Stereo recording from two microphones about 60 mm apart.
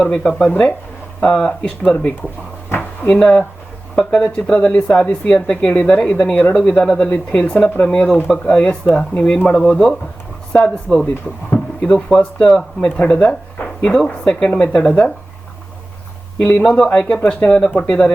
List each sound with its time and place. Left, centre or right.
0.0 s speech: centre
2.6 s a sound: left
3.1 s speech: left
8.6 s speech: left
9.6 s speech: centre
16.6 s speech: centre